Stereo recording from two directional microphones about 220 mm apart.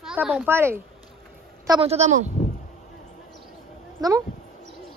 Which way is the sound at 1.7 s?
25° right (ahead or behind).